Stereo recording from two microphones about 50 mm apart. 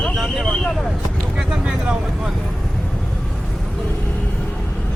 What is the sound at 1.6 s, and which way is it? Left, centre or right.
Speech, centre.